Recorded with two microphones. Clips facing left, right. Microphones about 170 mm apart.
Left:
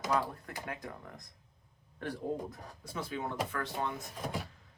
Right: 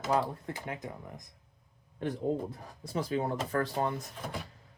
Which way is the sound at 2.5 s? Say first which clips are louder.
Right 4 dB; 35° right (ahead or behind).